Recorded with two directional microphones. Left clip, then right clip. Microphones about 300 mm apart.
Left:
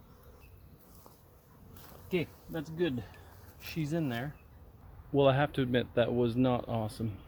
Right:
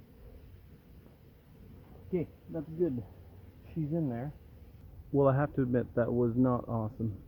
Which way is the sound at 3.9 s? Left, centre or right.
Left.